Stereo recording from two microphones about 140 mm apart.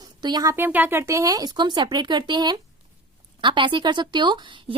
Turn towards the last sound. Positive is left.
turn(degrees=-35)  # may be behind; listen again after turning